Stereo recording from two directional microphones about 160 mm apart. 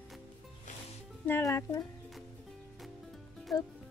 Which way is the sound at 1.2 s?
15° left (ahead or behind).